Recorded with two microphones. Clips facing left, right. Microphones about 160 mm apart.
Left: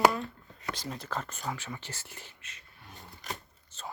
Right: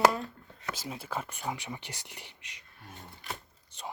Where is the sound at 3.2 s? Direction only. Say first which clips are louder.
Left 1 dB; 45° left (ahead or behind).